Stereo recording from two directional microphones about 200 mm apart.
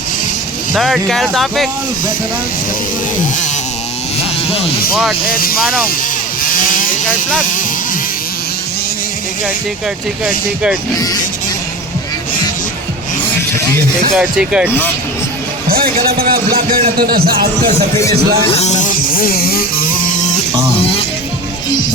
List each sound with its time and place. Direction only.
0.7 s speech: centre (ahead or behind)
5.3 s speech: 45° left (ahead or behind)
10.2 s speech: 5° right (ahead or behind)
14.2 s speech: 5° right (ahead or behind)
15.7 s speech: 50° right (ahead or behind)
18.5 s music: 35° left (ahead or behind)